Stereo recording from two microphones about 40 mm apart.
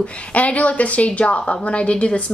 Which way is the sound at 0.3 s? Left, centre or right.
Left.